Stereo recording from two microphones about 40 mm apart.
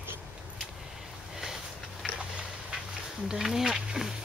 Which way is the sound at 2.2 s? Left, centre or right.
Right.